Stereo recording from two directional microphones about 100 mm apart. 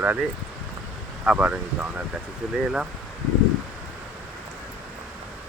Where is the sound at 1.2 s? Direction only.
15° right (ahead or behind).